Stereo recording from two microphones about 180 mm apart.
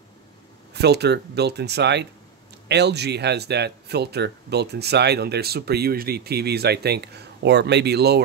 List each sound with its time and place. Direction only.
0.7 s speech: 65° right (ahead or behind)